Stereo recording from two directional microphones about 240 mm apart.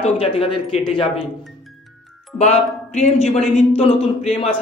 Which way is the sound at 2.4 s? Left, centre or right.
Left.